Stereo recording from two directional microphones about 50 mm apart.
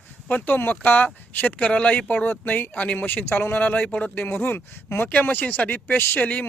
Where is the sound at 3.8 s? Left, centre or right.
Left.